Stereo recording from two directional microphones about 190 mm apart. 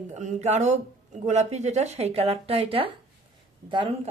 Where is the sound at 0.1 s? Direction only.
40° right (ahead or behind).